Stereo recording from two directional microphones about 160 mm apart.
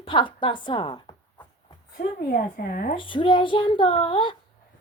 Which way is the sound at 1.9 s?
65° left (ahead or behind).